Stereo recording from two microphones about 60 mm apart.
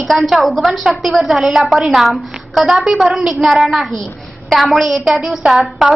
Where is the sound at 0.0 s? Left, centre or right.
Centre.